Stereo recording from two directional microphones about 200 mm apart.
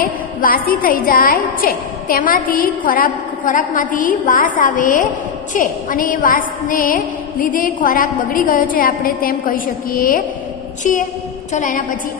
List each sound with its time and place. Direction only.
0.0 s a woman's voice: 45° left (ahead or behind)